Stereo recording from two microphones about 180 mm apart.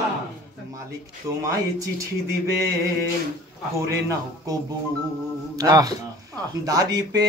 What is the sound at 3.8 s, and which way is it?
Speech, 15° right (ahead or behind).